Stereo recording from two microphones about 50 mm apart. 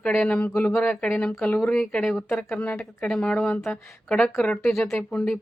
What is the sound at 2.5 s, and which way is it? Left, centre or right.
Speech, left.